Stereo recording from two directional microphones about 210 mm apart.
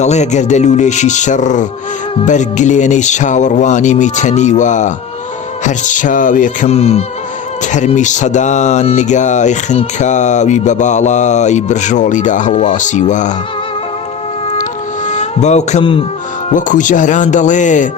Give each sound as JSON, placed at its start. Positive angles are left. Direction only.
{"t": 0.0, "sound": "speech", "side_deg": 35}
{"t": 14.5, "sound": "music", "side_deg": 35}
{"t": 16.5, "sound": "speech", "side_deg": 35}